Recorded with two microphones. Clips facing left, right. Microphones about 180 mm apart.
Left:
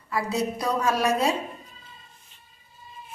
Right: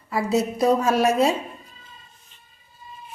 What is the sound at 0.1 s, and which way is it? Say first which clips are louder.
A woman's voice: right 4 dB; 25° right (ahead or behind).